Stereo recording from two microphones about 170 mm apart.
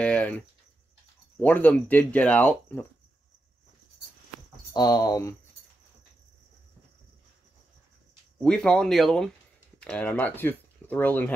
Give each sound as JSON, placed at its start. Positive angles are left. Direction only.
{"t": 0.0, "sound": "speech", "side_deg": 10}
{"t": 1.4, "sound": "speech", "side_deg": 10}
{"t": 4.7, "sound": "speech", "side_deg": 20}
{"t": 8.4, "sound": "speech", "side_deg": 5}